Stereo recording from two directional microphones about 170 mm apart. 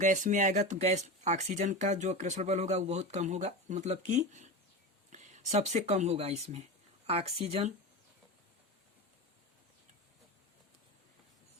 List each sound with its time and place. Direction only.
0.0 s speech: 45° right (ahead or behind)